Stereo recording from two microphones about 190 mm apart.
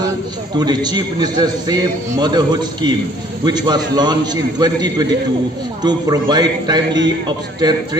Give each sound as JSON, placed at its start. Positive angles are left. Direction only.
{"t": 0.5, "sound": "a man's voice", "side_deg": -20}